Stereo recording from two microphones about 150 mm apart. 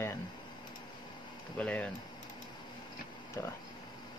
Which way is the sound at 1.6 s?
10° left (ahead or behind).